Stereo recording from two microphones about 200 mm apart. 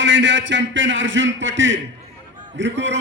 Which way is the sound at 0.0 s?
65° right (ahead or behind).